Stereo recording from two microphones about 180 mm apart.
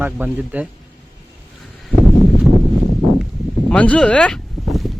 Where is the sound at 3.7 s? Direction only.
5° left (ahead or behind).